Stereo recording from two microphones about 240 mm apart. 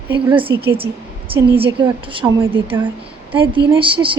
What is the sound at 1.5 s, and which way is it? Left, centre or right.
A woman's voice, right.